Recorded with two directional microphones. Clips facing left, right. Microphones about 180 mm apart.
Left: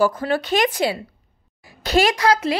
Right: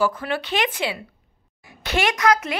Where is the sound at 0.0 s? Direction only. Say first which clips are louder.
Left 4 dB; 40° left (ahead or behind).